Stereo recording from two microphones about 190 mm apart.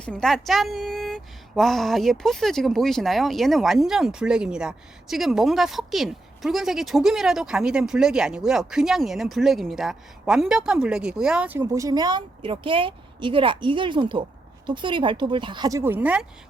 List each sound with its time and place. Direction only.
0.0 s a woman's voice: 5° left (ahead or behind)
11.6 s a woman's voice: 20° right (ahead or behind)